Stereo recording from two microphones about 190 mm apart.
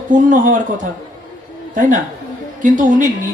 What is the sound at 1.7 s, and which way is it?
Speech, 45° right (ahead or behind).